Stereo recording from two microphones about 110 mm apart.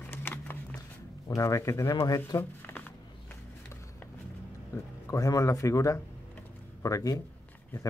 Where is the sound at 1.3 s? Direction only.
30° left (ahead or behind).